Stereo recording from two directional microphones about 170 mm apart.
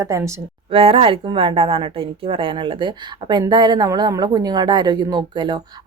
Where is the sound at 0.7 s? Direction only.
35° right (ahead or behind).